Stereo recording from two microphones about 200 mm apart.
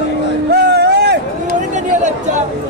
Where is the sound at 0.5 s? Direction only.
55° right (ahead or behind).